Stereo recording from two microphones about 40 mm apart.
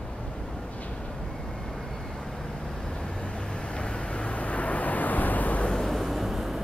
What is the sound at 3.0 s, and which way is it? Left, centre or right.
Vehicle, left.